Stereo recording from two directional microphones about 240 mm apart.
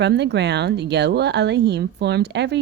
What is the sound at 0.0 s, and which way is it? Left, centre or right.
Speech, right.